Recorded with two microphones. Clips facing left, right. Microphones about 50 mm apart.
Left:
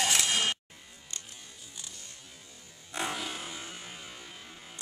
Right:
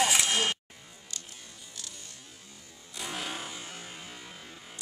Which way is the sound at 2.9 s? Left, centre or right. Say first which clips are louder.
Left 5 dB; left.